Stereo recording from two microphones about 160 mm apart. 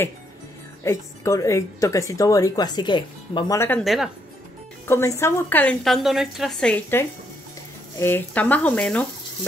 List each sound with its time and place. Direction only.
0.8 s a woman's voice: 20° left (ahead or behind)
3.5 s a woman's voice: 15° left (ahead or behind)
3.8 s speech: centre (ahead or behind)
4.8 s a woman's voice: 15° left (ahead or behind)